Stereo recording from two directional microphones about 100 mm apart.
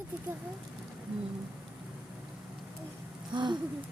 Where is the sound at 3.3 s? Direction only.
50° right (ahead or behind).